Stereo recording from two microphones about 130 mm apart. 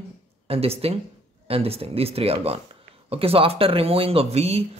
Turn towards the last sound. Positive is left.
turn(degrees=-50)  # may be behind; listen again after turning